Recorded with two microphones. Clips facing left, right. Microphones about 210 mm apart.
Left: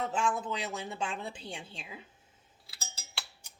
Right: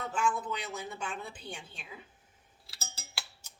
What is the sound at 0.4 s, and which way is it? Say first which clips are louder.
Speech: left 2 dB; 25° left (ahead or behind).